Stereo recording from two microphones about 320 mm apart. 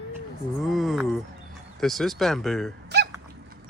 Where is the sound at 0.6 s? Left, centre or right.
Centre.